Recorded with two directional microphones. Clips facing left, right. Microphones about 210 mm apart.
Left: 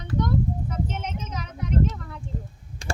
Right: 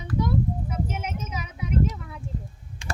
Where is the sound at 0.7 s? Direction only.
10° right (ahead or behind).